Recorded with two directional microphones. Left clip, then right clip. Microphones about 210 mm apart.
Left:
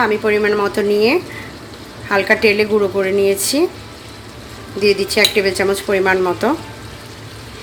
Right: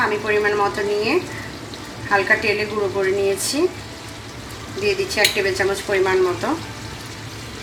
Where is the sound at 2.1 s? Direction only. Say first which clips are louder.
Left 4 dB; 45° left (ahead or behind).